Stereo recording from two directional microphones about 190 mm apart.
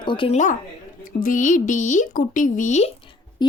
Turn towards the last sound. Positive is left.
turn(degrees=25)  # may be behind; listen again after turning